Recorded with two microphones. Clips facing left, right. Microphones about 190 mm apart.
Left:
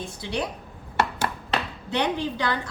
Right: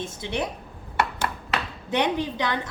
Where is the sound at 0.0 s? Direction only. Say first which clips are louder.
Right 1 dB; 20° right (ahead or behind).